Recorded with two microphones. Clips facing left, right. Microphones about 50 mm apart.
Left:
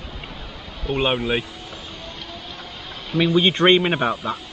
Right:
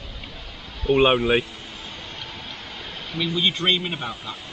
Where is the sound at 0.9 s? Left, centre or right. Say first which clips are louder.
Right 4 dB; centre.